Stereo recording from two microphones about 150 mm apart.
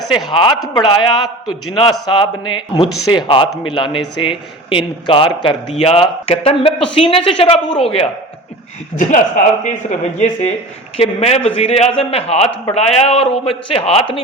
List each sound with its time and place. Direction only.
0.3 s a man's voice: 30° left (ahead or behind)
9.0 s a man's voice: 55° left (ahead or behind)
10.9 s a man's voice: 40° left (ahead or behind)